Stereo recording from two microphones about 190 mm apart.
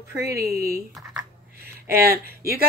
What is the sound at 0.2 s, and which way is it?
Speech, 55° right (ahead or behind).